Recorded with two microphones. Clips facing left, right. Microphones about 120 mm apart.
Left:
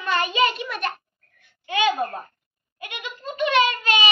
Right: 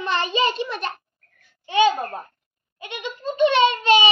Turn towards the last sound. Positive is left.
turn(degrees=-30)  # may be behind; listen again after turning